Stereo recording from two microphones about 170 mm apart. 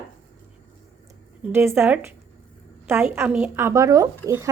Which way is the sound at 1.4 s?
15° right (ahead or behind).